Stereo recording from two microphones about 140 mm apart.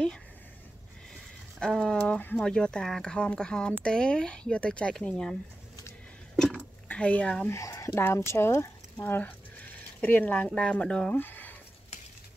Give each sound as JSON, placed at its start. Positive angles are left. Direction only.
{"t": 1.6, "sound": "speech", "side_deg": 5}
{"t": 6.3, "sound": "a sound", "side_deg": 5}
{"t": 7.4, "sound": "speech", "side_deg": 20}